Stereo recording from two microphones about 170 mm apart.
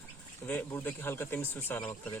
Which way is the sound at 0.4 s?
10° left (ahead or behind).